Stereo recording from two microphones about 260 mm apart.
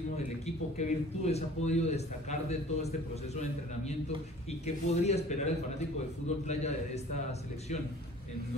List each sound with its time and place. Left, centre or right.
0.7 s a man's voice: left
4.6 s a man's voice: left